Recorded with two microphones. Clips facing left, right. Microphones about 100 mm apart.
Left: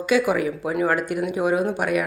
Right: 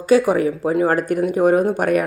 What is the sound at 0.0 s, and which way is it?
Speech, 40° right (ahead or behind).